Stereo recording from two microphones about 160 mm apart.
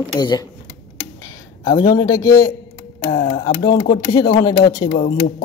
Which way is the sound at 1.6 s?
25° left (ahead or behind).